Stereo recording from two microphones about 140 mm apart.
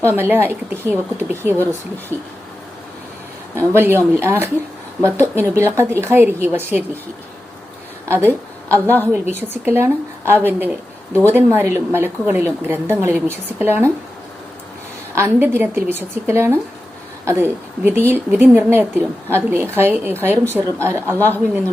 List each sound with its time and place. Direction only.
0.0 s speech: 15° right (ahead or behind)
3.7 s speech: 15° right (ahead or behind)
8.0 s speech: 15° right (ahead or behind)
15.1 s a woman's voice: 15° right (ahead or behind)